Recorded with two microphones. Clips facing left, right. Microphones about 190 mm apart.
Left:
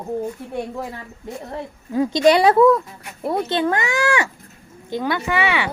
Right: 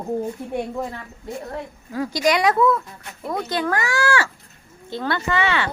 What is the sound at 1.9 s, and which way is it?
Speech, 20° left (ahead or behind).